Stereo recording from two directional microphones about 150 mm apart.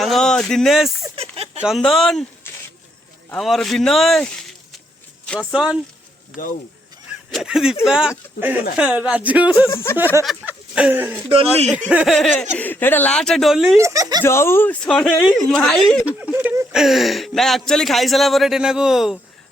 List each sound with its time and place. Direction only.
0.0 s speech: centre (ahead or behind)
1.1 s a sound: 40° right (ahead or behind)
1.6 s speech: centre (ahead or behind)
2.5 s a sound: 15° left (ahead or behind)
3.4 s speech: centre (ahead or behind)
5.2 s a sound: 5° left (ahead or behind)
5.5 s speech: 5° right (ahead or behind)
7.3 s speech: centre (ahead or behind)
9.6 s speech: 20° left (ahead or behind)
10.4 s speech: 10° right (ahead or behind)
12.5 s speech: 15° left (ahead or behind)
13.7 s speech: 20° right (ahead or behind)
14.2 s speech: 15° left (ahead or behind)
16.0 s speech: 10° right (ahead or behind)